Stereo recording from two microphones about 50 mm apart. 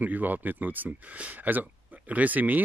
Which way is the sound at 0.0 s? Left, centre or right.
Right.